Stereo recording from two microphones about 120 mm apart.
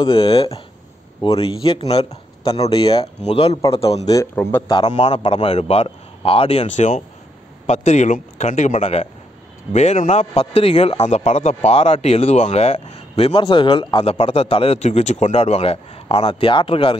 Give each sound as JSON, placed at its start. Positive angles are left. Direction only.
{"t": 0.0, "sound": "speech", "side_deg": 35}
{"t": 0.3, "sound": "speech", "side_deg": 50}
{"t": 3.3, "sound": "speech", "side_deg": 55}
{"t": 4.4, "sound": "a man's voice", "side_deg": 20}
{"t": 4.8, "sound": "a man's voice", "side_deg": 60}